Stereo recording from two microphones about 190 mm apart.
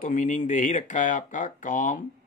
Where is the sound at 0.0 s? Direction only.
40° left (ahead or behind).